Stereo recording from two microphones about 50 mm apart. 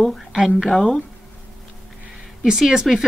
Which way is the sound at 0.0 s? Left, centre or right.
Centre.